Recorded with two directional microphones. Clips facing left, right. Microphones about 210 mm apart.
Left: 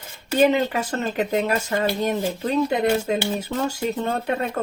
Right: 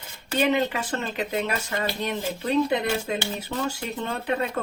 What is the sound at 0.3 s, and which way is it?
A woman's voice, 40° left (ahead or behind).